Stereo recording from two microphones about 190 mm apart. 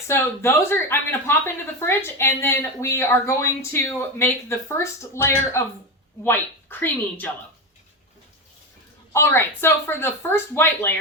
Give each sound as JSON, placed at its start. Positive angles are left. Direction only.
{"t": 0.1, "sound": "speech", "side_deg": 15}
{"t": 9.1, "sound": "speech", "side_deg": 10}